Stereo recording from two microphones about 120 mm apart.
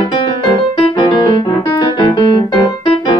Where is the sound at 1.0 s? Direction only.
45° left (ahead or behind).